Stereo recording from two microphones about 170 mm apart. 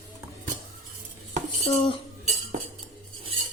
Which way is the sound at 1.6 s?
35° left (ahead or behind).